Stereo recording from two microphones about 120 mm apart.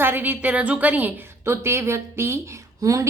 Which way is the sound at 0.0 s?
15° right (ahead or behind).